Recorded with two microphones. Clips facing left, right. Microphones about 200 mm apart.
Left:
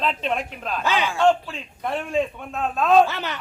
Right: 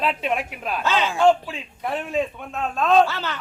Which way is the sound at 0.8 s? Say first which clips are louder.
Right 1 dB; 15° left (ahead or behind).